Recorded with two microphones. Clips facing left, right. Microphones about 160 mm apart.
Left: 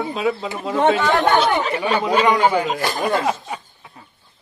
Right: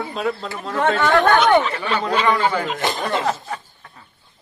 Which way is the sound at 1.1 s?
25° left (ahead or behind).